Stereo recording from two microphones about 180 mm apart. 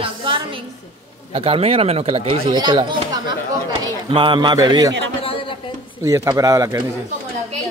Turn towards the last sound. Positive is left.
turn(degrees=-20)  # may be behind; listen again after turning